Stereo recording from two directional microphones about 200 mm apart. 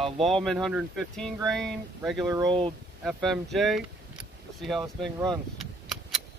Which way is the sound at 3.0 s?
Centre (ahead or behind).